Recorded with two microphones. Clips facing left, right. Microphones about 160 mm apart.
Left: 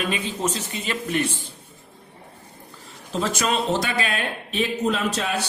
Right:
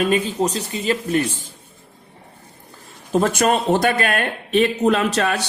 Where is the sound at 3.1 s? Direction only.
55° right (ahead or behind).